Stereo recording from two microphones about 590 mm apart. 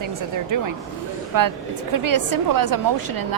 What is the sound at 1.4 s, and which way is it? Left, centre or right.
A woman's voice, right.